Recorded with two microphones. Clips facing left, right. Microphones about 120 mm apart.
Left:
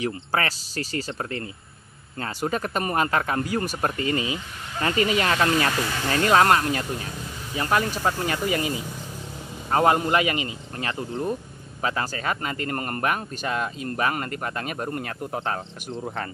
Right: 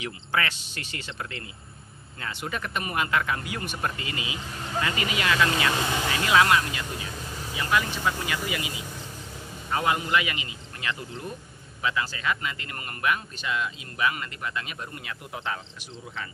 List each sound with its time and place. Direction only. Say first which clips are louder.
0.0 s speech: left 4 dB; 35° left (ahead or behind)